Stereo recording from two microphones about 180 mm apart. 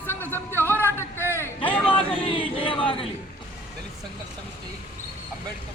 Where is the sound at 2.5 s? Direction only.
30° left (ahead or behind).